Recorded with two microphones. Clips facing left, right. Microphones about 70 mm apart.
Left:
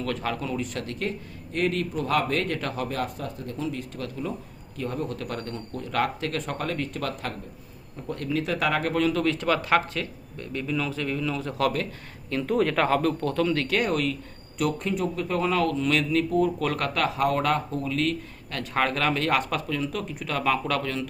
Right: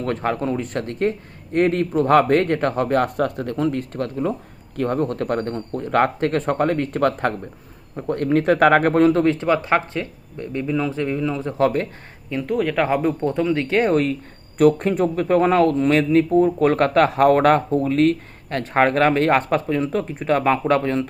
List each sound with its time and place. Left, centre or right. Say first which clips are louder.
0.0 s a man's voice: right 7 dB; right
12.3 s speech: right 2 dB; centre
12.9 s a man's voice: right 4 dB; centre